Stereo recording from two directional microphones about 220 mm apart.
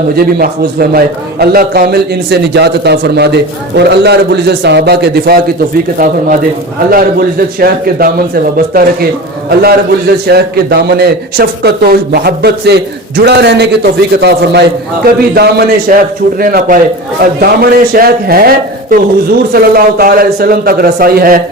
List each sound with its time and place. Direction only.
0.2 s a man's voice: 45° right (ahead or behind)
6.9 s a man's voice: 45° right (ahead or behind)